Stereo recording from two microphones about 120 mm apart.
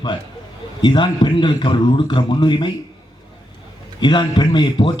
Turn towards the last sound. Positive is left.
turn(degrees=40)  # may be behind; listen again after turning